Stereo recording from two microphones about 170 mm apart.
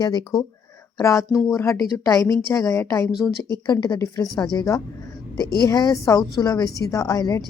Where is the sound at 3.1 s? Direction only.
Centre (ahead or behind).